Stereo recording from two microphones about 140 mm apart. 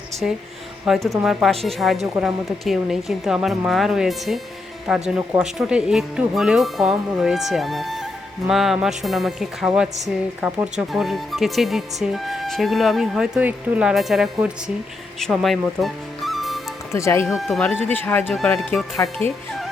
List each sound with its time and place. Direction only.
0.2 s speech: 5° right (ahead or behind)
16.9 s speech: 20° left (ahead or behind)
17.2 s speech: centre (ahead or behind)
17.7 s speech: 15° left (ahead or behind)